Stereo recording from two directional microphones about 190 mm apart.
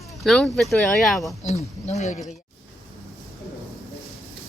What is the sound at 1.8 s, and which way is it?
Speech, 35° left (ahead or behind).